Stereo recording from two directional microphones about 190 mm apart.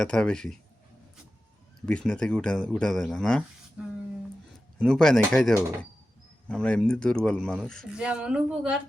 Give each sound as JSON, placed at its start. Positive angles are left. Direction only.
{"t": 0.0, "sound": "speech", "side_deg": 5}
{"t": 1.9, "sound": "speech", "side_deg": 5}
{"t": 4.8, "sound": "speech", "side_deg": 0}